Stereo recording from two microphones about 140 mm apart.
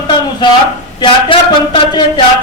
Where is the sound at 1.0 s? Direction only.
35° left (ahead or behind).